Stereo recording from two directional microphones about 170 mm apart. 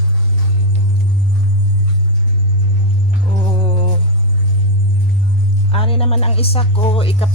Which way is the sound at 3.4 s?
30° left (ahead or behind).